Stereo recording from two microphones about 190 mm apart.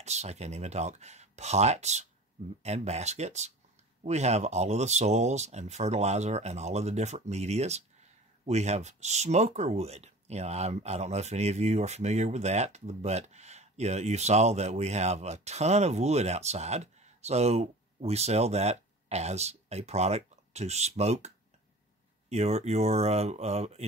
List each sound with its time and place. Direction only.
0.0 s speech: 35° right (ahead or behind)
22.3 s speech: 35° right (ahead or behind)